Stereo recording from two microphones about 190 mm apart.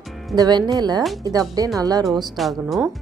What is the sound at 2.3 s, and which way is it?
Speech, centre (ahead or behind).